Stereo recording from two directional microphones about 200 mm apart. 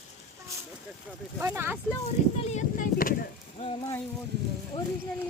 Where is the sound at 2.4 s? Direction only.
35° left (ahead or behind).